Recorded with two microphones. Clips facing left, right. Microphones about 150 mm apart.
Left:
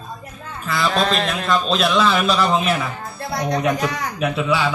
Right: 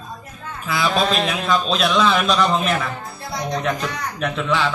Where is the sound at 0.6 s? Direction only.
Centre (ahead or behind).